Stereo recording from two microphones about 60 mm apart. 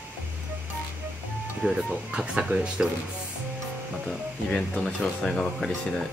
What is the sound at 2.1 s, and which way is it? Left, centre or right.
Speech, centre.